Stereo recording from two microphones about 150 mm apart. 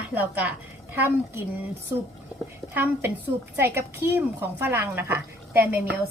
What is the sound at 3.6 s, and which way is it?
A woman's voice, 15° right (ahead or behind).